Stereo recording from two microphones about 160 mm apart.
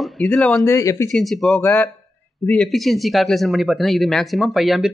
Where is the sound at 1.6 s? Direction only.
15° left (ahead or behind).